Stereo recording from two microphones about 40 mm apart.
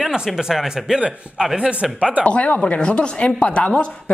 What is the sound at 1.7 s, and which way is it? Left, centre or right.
Speech, right.